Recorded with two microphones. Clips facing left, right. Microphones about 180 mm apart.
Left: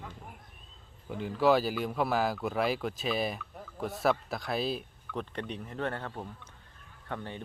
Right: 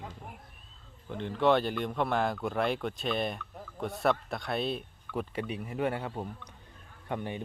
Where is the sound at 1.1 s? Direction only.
5° left (ahead or behind).